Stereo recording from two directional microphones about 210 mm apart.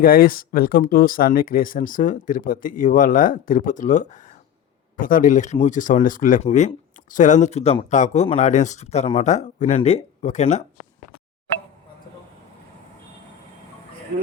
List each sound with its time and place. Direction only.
0.0 s speech: 45° left (ahead or behind)